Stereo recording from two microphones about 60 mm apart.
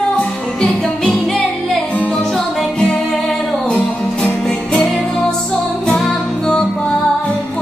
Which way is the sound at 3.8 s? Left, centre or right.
Centre.